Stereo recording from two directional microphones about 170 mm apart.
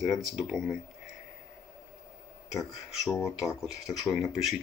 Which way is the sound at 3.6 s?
5° right (ahead or behind).